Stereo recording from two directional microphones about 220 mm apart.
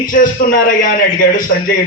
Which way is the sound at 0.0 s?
40° left (ahead or behind).